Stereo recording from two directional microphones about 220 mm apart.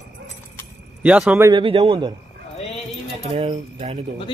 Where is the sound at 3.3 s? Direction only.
25° right (ahead or behind).